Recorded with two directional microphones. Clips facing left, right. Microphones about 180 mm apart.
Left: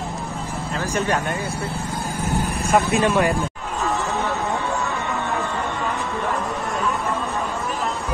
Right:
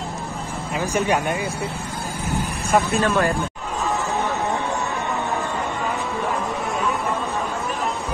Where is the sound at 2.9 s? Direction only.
15° left (ahead or behind).